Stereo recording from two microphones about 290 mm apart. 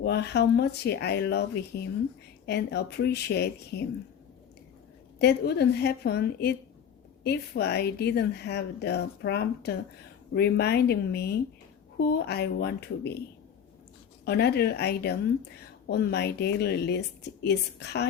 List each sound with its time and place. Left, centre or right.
0.0 s speech: left
5.2 s speech: left
14.3 s speech: left